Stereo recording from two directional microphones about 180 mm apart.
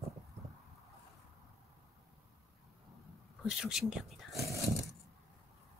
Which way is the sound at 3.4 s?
5° right (ahead or behind).